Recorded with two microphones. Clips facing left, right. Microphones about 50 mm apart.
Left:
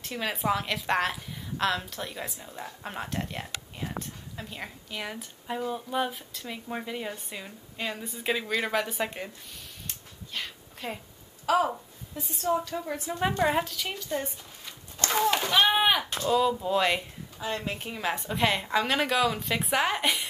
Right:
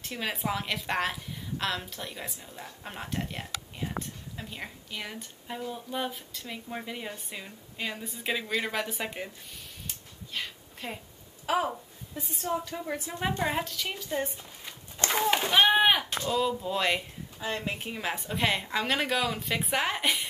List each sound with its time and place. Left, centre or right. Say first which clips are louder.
0.1 s speech: left 4 dB; centre
9.8 s a sound: even; centre
11.4 s a woman's voice: left 4 dB; centre
12.2 s speech: left 4 dB; centre
13.4 s speech: left 4 dB; centre
14.2 s a sound: right 2 dB; right
15.7 s artillery fire: right 1 dB; centre
16.3 s speech: left 5 dB; centre
17.6 s speech: even; centre